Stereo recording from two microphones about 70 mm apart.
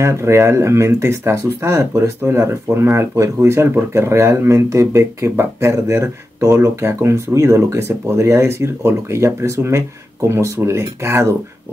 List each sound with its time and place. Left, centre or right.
0.0 s speech: right